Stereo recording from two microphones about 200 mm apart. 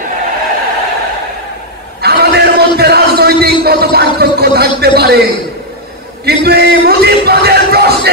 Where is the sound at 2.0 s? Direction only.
55° right (ahead or behind).